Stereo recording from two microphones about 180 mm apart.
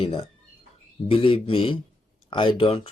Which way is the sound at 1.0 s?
30° left (ahead or behind).